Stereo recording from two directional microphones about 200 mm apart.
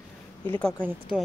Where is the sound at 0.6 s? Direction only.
5° left (ahead or behind).